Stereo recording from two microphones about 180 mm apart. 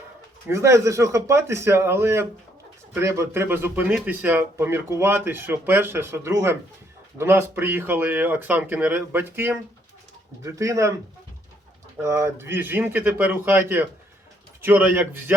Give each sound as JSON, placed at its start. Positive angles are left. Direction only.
{"t": 0.4, "sound": "speech", "side_deg": -15}
{"t": 11.9, "sound": "speech", "side_deg": -15}